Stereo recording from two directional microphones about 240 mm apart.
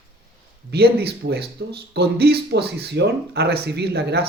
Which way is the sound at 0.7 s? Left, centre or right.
Right.